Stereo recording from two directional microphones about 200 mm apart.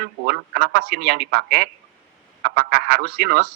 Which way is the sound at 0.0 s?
50° right (ahead or behind).